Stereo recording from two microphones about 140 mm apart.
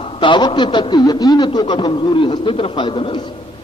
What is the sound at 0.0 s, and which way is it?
A man's voice, 40° left (ahead or behind).